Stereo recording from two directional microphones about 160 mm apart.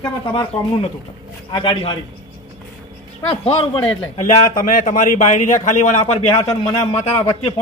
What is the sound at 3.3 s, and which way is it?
A man's voice, 35° left (ahead or behind).